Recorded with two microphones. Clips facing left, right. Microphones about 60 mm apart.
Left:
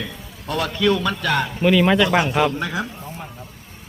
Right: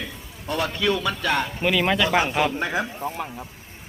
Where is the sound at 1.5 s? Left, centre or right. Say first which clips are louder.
Left 6 dB; centre.